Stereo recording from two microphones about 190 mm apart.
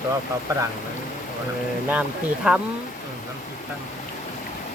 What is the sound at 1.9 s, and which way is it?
Speech, 5° right (ahead or behind).